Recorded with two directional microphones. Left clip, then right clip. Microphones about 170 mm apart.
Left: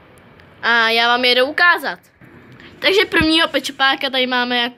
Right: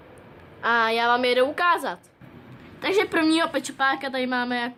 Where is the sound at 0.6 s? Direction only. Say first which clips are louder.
Left 7 dB; 5° left (ahead or behind).